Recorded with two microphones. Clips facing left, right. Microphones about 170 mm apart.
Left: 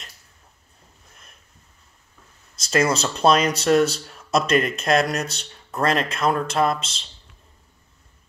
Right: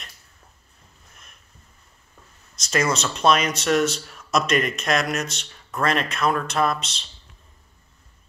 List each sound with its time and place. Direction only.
2.5 s speech: 30° left (ahead or behind)